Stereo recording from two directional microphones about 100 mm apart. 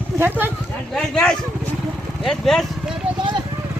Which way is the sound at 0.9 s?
10° left (ahead or behind).